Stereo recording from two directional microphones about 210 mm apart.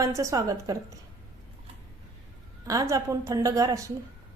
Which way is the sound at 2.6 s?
15° right (ahead or behind).